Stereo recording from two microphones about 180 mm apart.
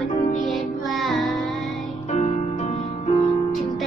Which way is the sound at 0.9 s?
Centre (ahead or behind).